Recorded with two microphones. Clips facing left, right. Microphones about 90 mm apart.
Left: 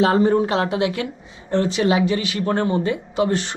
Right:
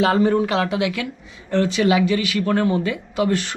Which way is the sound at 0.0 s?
25° left (ahead or behind).